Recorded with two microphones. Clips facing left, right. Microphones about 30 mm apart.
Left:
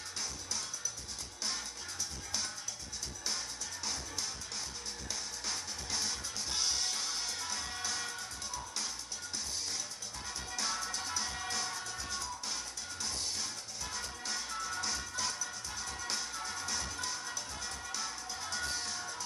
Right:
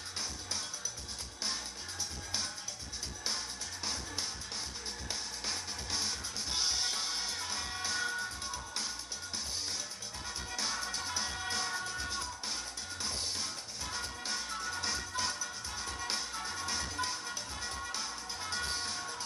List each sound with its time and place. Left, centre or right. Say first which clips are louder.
3.3 s music: right 1 dB; centre
5.4 s music: right 1 dB; centre
10.5 s music: even; centre